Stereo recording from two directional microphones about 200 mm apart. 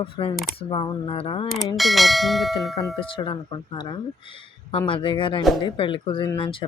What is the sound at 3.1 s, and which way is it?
Speech, 25° left (ahead or behind).